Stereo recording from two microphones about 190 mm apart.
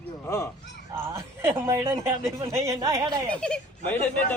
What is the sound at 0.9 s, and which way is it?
Speech, 10° right (ahead or behind).